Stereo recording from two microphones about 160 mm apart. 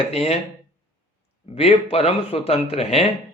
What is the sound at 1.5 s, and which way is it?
Speech, 40° left (ahead or behind).